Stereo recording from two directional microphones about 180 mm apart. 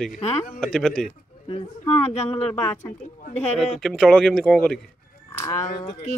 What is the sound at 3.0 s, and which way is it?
Speech, 45° left (ahead or behind).